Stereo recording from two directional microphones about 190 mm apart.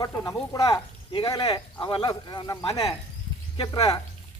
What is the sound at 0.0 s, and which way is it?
Speech, 15° left (ahead or behind).